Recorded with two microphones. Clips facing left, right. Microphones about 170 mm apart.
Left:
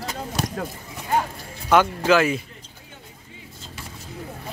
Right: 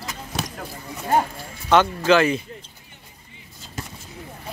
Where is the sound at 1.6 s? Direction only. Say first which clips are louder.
Right 1 dB; 5° left (ahead or behind).